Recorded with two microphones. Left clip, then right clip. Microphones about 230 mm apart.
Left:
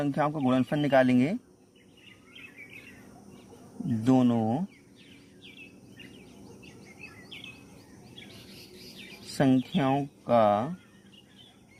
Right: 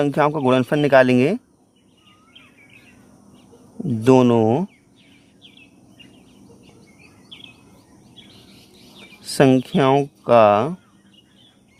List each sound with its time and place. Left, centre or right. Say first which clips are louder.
0.0 s speech: right 10 dB; right
4.0 s speech: right 12 dB; right
9.4 s speech: right 11 dB; right